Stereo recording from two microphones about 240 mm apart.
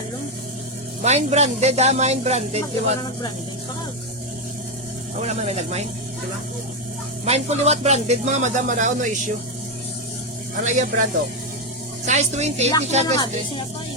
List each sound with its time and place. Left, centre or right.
1.0 s speech: right
5.2 s speech: right
7.3 s speech: right
10.6 s speech: right
12.0 s speech: right